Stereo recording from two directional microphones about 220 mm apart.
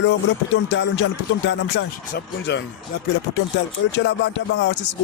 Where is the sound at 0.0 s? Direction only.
55° left (ahead or behind).